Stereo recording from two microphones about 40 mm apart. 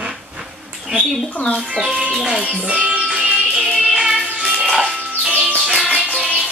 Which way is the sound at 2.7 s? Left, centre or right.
Right.